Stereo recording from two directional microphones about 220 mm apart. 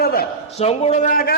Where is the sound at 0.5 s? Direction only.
30° left (ahead or behind).